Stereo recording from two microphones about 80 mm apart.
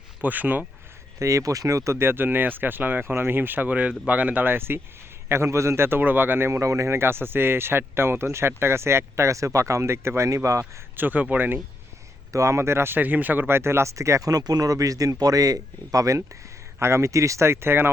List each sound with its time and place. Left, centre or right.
0.2 s speech: right
1.2 s a man's voice: right
10.9 s speech: right
12.3 s a man's voice: right